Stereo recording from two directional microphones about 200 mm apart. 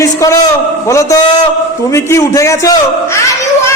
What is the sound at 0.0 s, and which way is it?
A man's voice, 15° left (ahead or behind).